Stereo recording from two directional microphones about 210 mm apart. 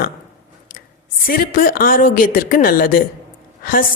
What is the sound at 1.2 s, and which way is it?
A woman's voice, 40° left (ahead or behind).